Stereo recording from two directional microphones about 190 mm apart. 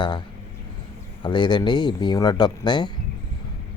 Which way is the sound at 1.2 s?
25° left (ahead or behind).